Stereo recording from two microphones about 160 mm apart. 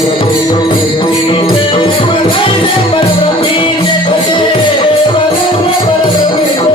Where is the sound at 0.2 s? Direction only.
30° left (ahead or behind).